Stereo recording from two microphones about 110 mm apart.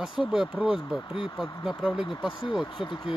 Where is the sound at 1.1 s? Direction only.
50° left (ahead or behind).